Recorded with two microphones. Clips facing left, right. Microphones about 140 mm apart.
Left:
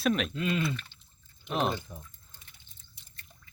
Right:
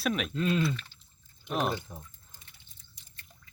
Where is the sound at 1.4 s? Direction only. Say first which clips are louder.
Left 1 dB; 5° right (ahead or behind).